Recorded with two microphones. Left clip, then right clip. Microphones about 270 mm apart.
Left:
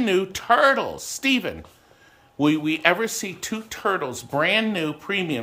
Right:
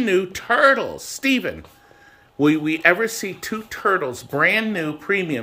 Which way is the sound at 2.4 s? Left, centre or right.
Left.